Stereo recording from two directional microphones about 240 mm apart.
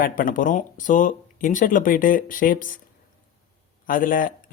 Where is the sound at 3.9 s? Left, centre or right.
Left.